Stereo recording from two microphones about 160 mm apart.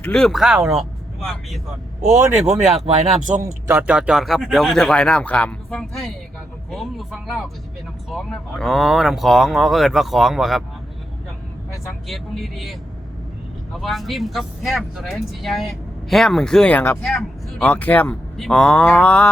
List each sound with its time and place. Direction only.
0.0 s speech: 5° left (ahead or behind)
2.0 s speech: 15° right (ahead or behind)
2.8 s speech: 45° right (ahead or behind)
3.4 s speech: 10° right (ahead or behind)
11.7 s speech: centre (ahead or behind)
13.7 s speech: centre (ahead or behind)